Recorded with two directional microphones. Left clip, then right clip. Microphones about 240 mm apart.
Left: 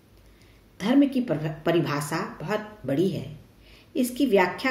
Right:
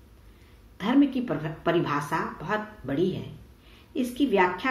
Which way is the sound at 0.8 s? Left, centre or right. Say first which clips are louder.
Left 1 dB; left.